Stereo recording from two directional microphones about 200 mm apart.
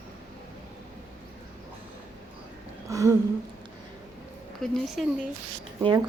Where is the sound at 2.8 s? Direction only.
15° right (ahead or behind).